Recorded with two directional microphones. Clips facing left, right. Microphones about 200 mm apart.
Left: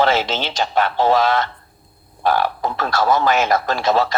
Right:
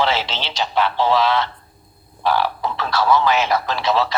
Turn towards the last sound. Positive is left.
turn(degrees=45)  # may be behind; listen again after turning